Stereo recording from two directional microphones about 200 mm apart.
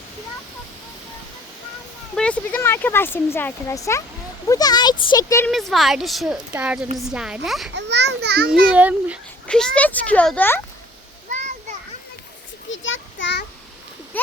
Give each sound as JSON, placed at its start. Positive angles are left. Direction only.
{"t": 2.1, "sound": "speech", "side_deg": 5}
{"t": 5.5, "sound": "a woman's voice", "side_deg": 0}
{"t": 7.7, "sound": "a child's voice", "side_deg": -60}
{"t": 8.7, "sound": "speech", "side_deg": -5}
{"t": 9.5, "sound": "speech", "side_deg": 5}
{"t": 12.7, "sound": "a sound", "side_deg": 70}